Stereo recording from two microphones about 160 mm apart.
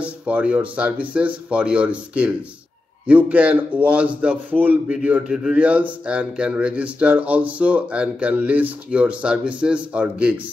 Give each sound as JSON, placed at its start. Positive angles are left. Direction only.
{"t": 0.0, "sound": "speech", "side_deg": -10}